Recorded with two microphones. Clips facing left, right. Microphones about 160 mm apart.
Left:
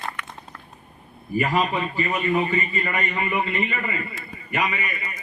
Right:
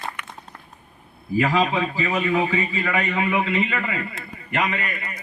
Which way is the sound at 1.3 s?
90° right.